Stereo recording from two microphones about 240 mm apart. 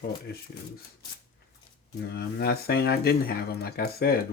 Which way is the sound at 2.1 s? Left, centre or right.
Left.